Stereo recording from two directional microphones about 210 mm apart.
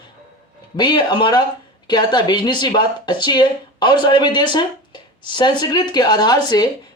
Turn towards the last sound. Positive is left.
turn(degrees=20)  # may be behind; listen again after turning